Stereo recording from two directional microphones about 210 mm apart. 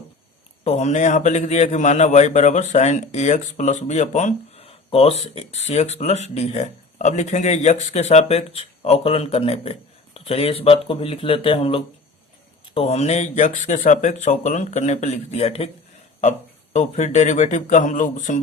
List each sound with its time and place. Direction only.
0.6 s a man's voice: 30° left (ahead or behind)
16.7 s a man's voice: 35° left (ahead or behind)